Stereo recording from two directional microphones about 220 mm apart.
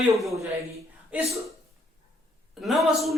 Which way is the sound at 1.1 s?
5° right (ahead or behind).